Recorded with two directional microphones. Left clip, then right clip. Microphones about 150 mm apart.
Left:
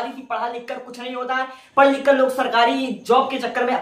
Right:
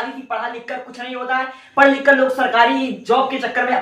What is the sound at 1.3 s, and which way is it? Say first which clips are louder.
Speech: right 4 dB; 20° left (ahead or behind).